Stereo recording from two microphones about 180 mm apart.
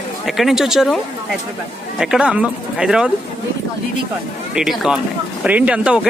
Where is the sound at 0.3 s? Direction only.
Centre (ahead or behind).